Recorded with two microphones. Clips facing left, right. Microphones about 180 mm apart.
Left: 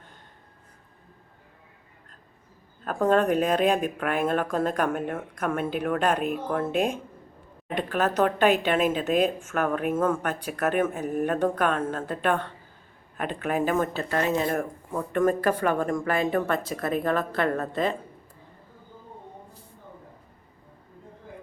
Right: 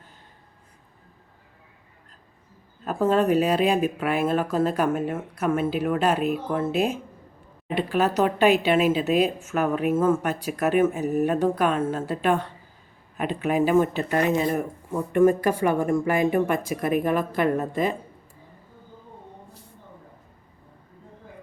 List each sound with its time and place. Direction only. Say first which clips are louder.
2.8 s speech: right 1 dB; 5° right (ahead or behind)